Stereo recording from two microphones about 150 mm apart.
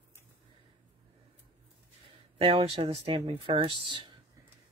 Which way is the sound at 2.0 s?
40° right (ahead or behind).